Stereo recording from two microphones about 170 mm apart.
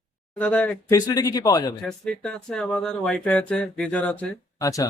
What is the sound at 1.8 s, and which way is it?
Speech, centre (ahead or behind).